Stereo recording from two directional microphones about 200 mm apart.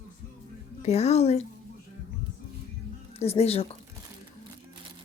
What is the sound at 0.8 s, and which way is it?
Speech, 35° left (ahead or behind).